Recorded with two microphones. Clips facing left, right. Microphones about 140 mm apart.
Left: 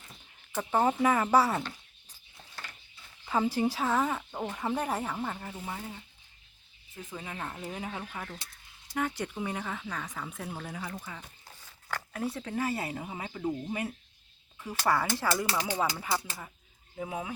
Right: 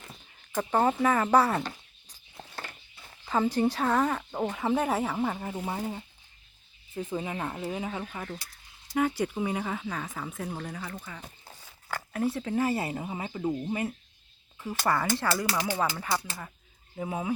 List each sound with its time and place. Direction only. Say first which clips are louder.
0.7 s speech: right 1 dB; 10° left (ahead or behind)
3.2 s a woman's voice: right 2 dB; 10° left (ahead or behind); by 5.4 s 10° right (ahead or behind)
5.6 s speech: right 7 dB; 40° right (ahead or behind)
7.0 s a woman's voice: right 7 dB; 25° right (ahead or behind); by 11.2 s 10° left (ahead or behind)
11.9 s a woman's voice: right 5 dB; 5° right (ahead or behind)
15.3 s speech: right 1 dB; 25° left (ahead or behind)
15.8 s speech: right 1 dB; 5° left (ahead or behind)